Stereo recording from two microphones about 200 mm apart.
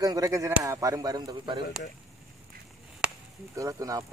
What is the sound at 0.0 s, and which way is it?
Speech, 15° right (ahead or behind).